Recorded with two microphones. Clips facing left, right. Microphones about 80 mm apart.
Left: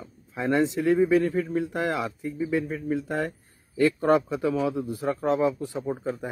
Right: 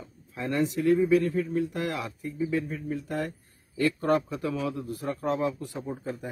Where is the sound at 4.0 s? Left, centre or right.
Centre.